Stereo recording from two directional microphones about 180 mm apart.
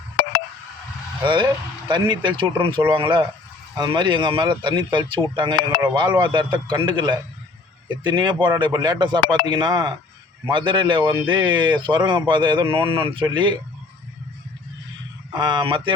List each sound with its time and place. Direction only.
1.2 s a man's voice: 25° right (ahead or behind)
15.4 s a man's voice: 25° right (ahead or behind)